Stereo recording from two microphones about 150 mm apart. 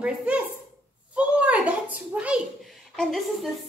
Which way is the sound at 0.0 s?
10° right (ahead or behind).